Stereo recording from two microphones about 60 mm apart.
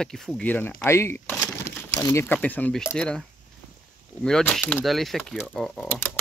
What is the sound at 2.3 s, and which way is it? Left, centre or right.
Speech, left.